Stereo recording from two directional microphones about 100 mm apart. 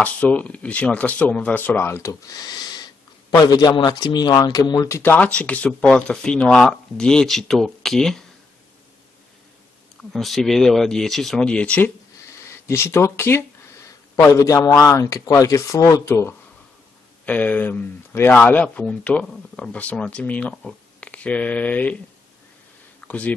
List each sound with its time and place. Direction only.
0.0 s speech: 15° left (ahead or behind); by 5.1 s 30° left (ahead or behind)
5.1 s speech: 10° left (ahead or behind)
10.1 s speech: 5° left (ahead or behind)
12.4 s speech: 25° left (ahead or behind)
17.3 s speech: 15° left (ahead or behind)
22.9 s a sound: 15° left (ahead or behind)